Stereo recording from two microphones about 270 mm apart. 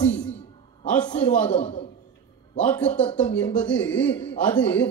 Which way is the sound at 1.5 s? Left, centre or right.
Left.